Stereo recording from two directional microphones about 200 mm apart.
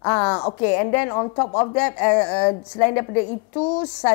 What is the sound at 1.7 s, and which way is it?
Speech, 10° left (ahead or behind).